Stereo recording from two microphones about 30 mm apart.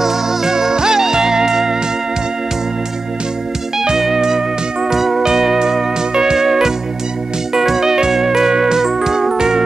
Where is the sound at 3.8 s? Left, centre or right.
Centre.